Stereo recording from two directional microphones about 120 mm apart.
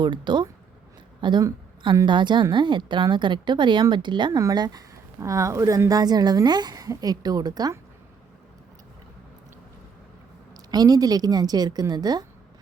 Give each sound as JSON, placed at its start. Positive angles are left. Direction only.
{"t": 0.0, "sound": "a woman's voice", "side_deg": -40}
{"t": 10.7, "sound": "a woman's voice", "side_deg": -35}